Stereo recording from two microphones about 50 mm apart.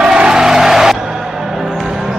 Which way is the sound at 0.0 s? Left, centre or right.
Centre.